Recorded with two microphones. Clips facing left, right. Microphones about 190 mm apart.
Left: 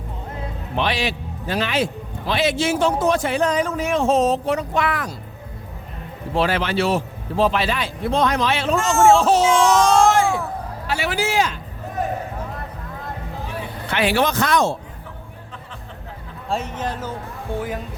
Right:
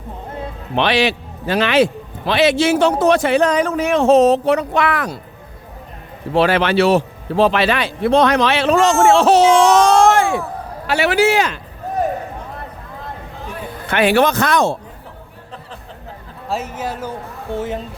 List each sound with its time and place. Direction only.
0.8 s a man's voice: 75° right (ahead or behind)
6.3 s a man's voice: 70° right (ahead or behind)
10.8 s a man's voice: 70° right (ahead or behind)
13.9 s speech: 55° right (ahead or behind)
16.5 s speech: 5° right (ahead or behind)
17.6 s speech: 25° right (ahead or behind)